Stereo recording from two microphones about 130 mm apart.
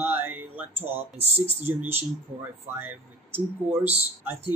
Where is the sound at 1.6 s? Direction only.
15° right (ahead or behind).